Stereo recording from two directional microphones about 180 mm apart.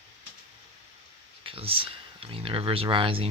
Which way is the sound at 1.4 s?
30° right (ahead or behind).